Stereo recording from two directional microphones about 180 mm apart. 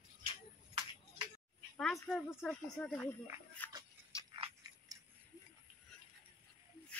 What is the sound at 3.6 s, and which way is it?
Music, 10° left (ahead or behind).